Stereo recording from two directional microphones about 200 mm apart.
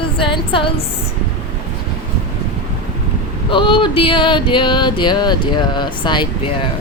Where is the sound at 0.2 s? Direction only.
25° left (ahead or behind).